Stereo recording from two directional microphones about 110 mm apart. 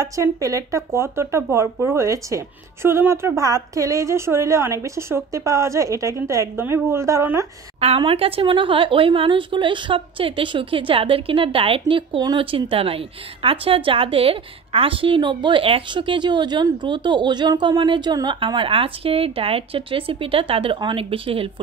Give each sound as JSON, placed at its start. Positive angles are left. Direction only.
{"t": 0.0, "sound": "speech", "side_deg": -30}
{"t": 8.0, "sound": "a woman's voice", "side_deg": -55}